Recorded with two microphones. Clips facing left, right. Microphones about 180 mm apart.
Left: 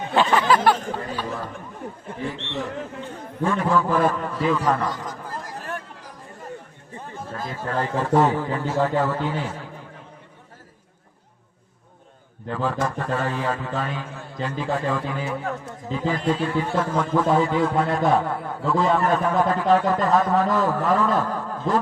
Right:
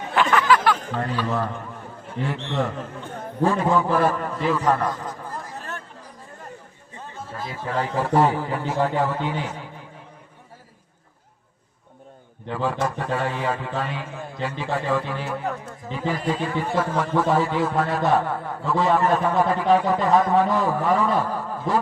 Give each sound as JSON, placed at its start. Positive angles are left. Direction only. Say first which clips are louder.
{"t": 0.1, "sound": "speech", "louder": "even", "side_deg": 25}
{"t": 0.9, "sound": "a man's voice", "louder": "right 4 dB", "side_deg": -70}
{"t": 3.4, "sound": "a man's voice", "louder": "right 2 dB", "side_deg": -35}
{"t": 3.7, "sound": "a man's voice", "louder": "even", "side_deg": -15}
{"t": 4.9, "sound": "a sound", "louder": "right 1 dB", "side_deg": 80}
{"t": 7.3, "sound": "a man's voice", "louder": "even", "side_deg": -10}
{"t": 12.5, "sound": "a man's voice", "louder": "even", "side_deg": -5}